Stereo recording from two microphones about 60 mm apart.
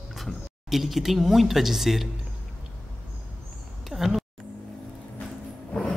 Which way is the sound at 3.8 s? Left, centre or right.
Centre.